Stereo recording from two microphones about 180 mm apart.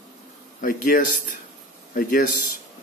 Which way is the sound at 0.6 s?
50° left (ahead or behind).